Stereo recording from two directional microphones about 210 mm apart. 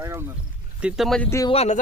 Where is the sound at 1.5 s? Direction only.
30° left (ahead or behind).